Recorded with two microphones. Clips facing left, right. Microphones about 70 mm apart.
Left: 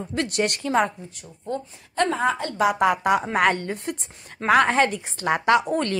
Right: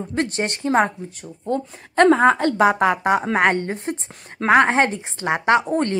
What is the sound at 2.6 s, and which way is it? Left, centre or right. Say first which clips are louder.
A woman's voice: right 1 dB; right.